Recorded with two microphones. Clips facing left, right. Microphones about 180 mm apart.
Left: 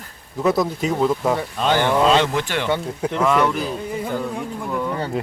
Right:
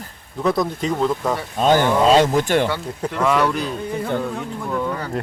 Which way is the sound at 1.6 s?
45° right (ahead or behind).